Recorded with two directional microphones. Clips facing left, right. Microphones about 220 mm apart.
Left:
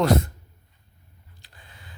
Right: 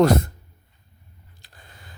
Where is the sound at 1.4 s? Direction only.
45° right (ahead or behind).